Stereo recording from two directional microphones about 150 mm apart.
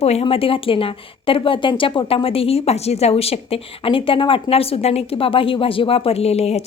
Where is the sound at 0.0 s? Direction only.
45° left (ahead or behind).